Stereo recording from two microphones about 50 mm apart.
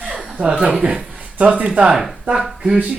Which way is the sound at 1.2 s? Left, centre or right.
Right.